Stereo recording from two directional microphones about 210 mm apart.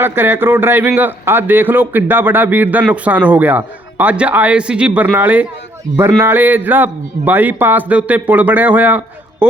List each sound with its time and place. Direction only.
0.0 s a man's voice: 10° right (ahead or behind)